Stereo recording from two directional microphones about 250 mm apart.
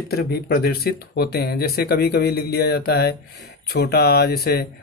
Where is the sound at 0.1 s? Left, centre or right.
Left.